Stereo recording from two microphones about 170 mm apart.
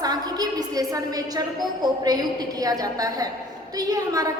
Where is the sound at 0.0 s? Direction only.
25° right (ahead or behind).